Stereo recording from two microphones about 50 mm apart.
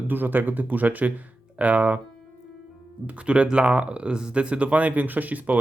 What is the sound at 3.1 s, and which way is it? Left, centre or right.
Speech, right.